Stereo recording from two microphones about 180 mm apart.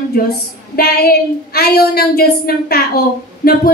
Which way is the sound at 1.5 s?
60° left (ahead or behind).